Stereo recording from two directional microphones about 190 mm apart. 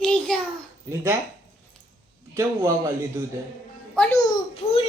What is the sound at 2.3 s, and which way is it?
Speech, 15° right (ahead or behind).